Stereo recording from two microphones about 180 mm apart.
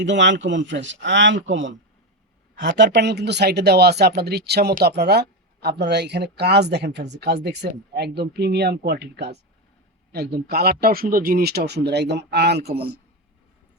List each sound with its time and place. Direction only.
0.0 s speech: 80° right
2.6 s speech: 75° right (ahead or behind)